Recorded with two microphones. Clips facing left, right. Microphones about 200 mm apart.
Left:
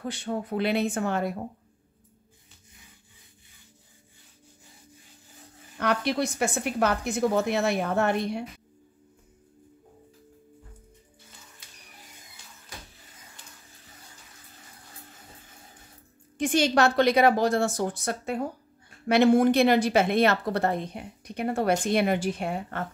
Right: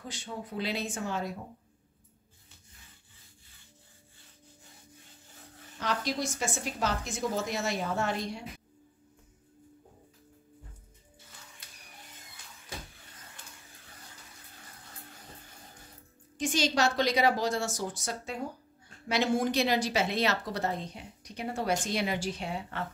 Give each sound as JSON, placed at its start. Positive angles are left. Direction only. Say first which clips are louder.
{"t": 0.0, "sound": "a woman's voice", "louder": "left 9 dB", "side_deg": 60}
{"t": 5.8, "sound": "a woman's voice", "louder": "left 6 dB", "side_deg": 60}
{"t": 16.3, "sound": "a woman's voice", "louder": "left 6 dB", "side_deg": 60}